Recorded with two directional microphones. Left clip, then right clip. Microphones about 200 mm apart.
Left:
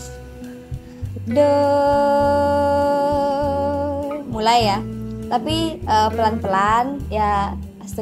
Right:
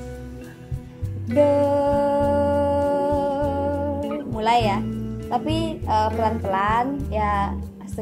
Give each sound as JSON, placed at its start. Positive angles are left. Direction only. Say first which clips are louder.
{"t": 1.3, "sound": "music", "louder": "left 2 dB", "side_deg": 0}
{"t": 1.6, "sound": "music", "louder": "left 4 dB", "side_deg": 35}
{"t": 6.4, "sound": "speech", "louder": "left 4 dB", "side_deg": 40}